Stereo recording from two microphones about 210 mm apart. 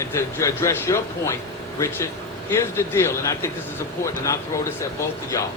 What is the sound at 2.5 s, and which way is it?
Speech, 10° left (ahead or behind).